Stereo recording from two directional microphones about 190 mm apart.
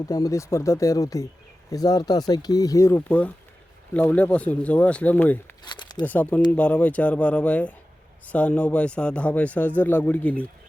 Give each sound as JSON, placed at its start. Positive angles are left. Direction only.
{"t": 0.0, "sound": "a man's voice", "side_deg": 20}
{"t": 5.6, "sound": "a sound", "side_deg": 25}
{"t": 6.1, "sound": "a man's voice", "side_deg": 10}